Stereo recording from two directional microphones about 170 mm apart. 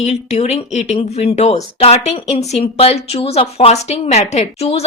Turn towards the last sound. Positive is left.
turn(degrees=40)  # may be behind; listen again after turning